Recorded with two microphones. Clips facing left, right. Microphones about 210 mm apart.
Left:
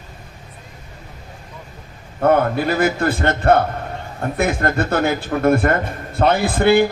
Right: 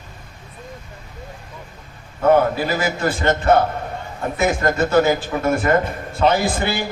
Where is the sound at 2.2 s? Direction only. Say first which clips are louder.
Even; 55° left (ahead or behind).